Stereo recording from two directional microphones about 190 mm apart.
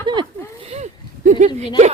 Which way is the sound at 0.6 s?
35° right (ahead or behind).